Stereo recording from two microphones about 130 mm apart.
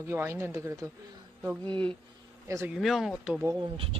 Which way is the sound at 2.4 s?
20° right (ahead or behind).